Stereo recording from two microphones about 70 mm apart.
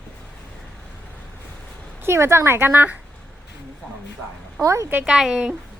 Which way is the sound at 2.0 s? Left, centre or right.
Right.